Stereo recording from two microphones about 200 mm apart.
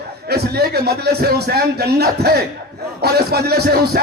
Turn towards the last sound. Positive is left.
turn(degrees=-55)  # may be behind; listen again after turning